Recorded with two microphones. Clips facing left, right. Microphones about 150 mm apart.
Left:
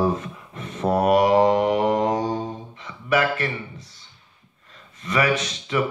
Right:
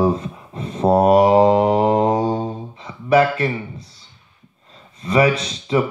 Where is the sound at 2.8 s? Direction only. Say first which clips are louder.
Right 7 dB; 30° right (ahead or behind).